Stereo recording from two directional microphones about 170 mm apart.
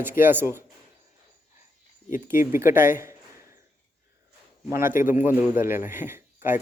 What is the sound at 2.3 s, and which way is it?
Speech, 15° right (ahead or behind).